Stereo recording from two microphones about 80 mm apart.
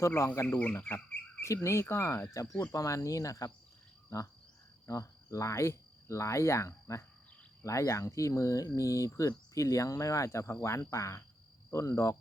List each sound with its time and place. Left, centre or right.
0.0 s speech: left
0.8 s cricket: left
2.7 s speech: left
4.9 s speech: left